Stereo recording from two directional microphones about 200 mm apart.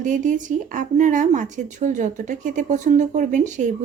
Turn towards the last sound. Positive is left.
turn(degrees=-40)  # may be behind; listen again after turning